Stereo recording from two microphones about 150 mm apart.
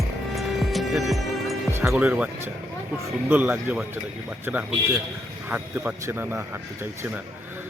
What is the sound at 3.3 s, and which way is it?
Speech, 10° right (ahead or behind).